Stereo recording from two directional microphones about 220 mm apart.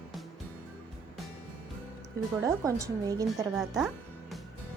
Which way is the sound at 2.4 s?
15° right (ahead or behind).